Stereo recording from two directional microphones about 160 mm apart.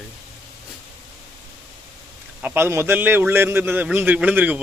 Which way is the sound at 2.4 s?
15° right (ahead or behind).